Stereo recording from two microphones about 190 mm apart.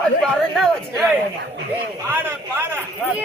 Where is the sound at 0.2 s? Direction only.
Centre (ahead or behind).